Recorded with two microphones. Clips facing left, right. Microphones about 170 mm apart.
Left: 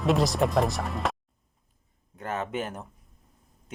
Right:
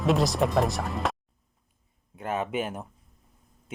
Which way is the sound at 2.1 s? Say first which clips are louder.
Right 2 dB; 15° right (ahead or behind).